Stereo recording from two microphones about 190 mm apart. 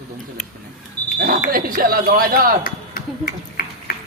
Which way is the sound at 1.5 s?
50° right (ahead or behind).